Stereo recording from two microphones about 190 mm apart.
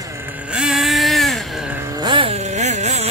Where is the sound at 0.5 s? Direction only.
5° right (ahead or behind).